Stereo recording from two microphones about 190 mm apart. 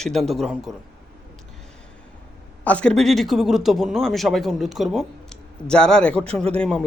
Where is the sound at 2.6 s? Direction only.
5° left (ahead or behind).